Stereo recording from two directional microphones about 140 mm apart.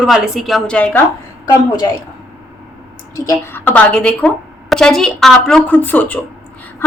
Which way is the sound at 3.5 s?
10° left (ahead or behind).